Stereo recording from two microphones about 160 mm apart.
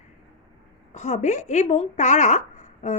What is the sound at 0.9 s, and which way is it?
A woman's voice, 45° left (ahead or behind).